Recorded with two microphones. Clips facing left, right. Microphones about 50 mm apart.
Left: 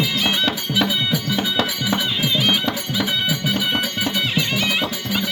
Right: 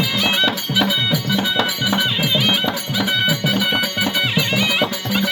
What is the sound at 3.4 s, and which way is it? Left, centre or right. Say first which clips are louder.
Music: right 2 dB; centre.